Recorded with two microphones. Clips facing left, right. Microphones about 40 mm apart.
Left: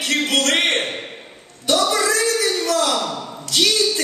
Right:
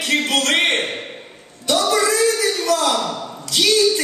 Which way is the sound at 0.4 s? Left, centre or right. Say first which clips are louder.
Left 1 dB; centre.